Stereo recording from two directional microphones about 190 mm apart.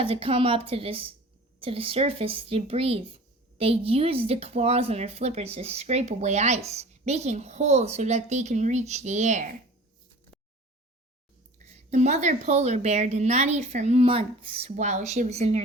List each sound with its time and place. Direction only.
0.0 s a woman's voice: 30° right (ahead or behind)
11.6 s speech: 35° right (ahead or behind)